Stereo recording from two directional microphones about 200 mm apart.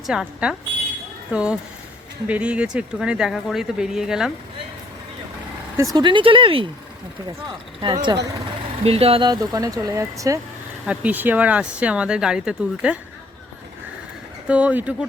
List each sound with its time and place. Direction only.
0.1 s speech: 5° right (ahead or behind)
5.7 s speech: 20° right (ahead or behind)
7.8 s speech: 25° right (ahead or behind); by 13.0 s 5° right (ahead or behind)
14.4 s speech: 5° right (ahead or behind)